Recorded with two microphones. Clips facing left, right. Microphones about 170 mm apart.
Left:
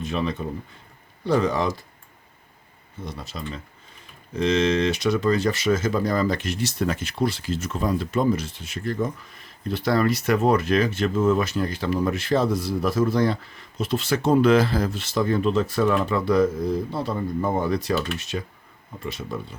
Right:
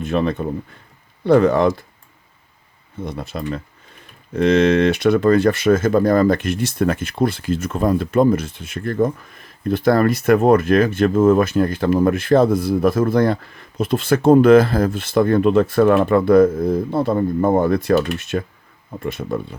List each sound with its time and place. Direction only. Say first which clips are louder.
0.0 s speech: right 7 dB; 55° right (ahead or behind)
3.0 s speech: right 8 dB; 55° right (ahead or behind)